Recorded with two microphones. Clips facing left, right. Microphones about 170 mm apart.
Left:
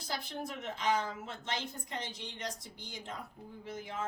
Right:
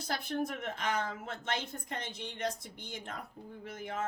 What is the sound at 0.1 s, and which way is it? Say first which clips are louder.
A woman's voice: right 5 dB; 55° right (ahead or behind).